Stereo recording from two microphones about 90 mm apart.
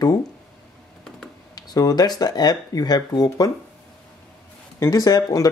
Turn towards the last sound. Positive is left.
turn(degrees=45)  # may be behind; listen again after turning